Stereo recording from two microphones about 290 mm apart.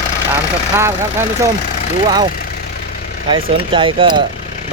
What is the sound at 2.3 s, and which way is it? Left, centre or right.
Vehicle, left.